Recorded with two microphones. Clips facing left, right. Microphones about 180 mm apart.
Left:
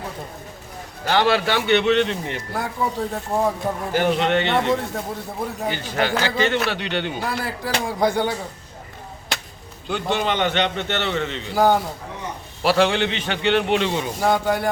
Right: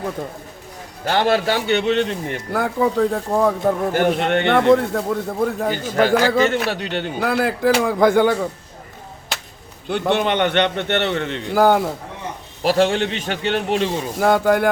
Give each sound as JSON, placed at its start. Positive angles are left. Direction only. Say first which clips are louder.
{"t": 1.0, "sound": "a man's voice", "louder": "right 1 dB", "side_deg": -45}
{"t": 7.2, "sound": "a man's voice", "louder": "right 8 dB", "side_deg": -60}
{"t": 9.9, "sound": "a man's voice", "louder": "right 4 dB", "side_deg": -60}
{"t": 12.6, "sound": "a man's voice", "louder": "right 1 dB", "side_deg": -40}